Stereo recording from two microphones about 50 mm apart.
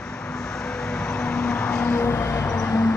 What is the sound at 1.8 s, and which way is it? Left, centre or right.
Vehicle, left.